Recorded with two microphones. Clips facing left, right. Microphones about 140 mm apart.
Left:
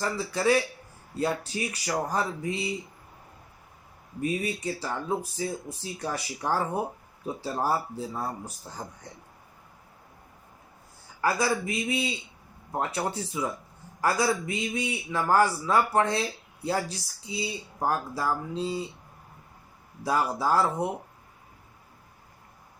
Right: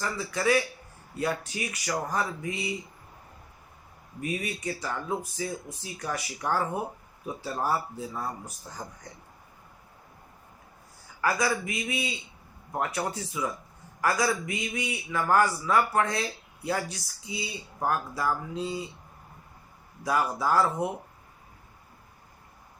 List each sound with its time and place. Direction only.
0.0 s speech: 30° left (ahead or behind)
4.2 s a man's voice: 30° left (ahead or behind)
11.2 s a man's voice: 30° left (ahead or behind)
20.1 s a man's voice: 30° left (ahead or behind)